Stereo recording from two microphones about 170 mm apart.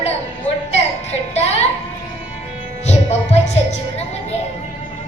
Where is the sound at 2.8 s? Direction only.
40° left (ahead or behind).